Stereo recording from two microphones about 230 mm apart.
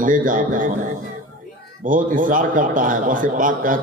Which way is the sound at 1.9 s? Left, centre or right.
Right.